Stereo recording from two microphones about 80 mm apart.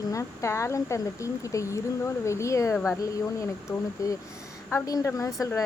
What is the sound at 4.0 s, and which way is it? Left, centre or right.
A woman's voice, left.